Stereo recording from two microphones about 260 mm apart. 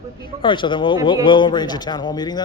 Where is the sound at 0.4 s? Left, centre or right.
Centre.